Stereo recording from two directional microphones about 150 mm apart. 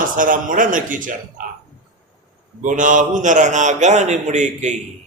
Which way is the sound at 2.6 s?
60° right (ahead or behind).